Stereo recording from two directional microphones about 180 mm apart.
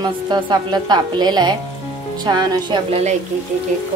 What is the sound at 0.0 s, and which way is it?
A woman's voice, 25° right (ahead or behind).